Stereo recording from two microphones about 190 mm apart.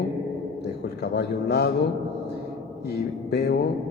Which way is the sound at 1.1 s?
60° left (ahead or behind).